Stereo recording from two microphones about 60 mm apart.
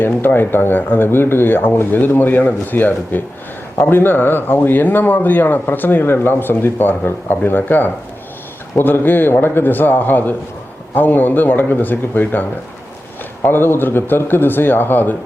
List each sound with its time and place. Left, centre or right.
0.0 s speech: left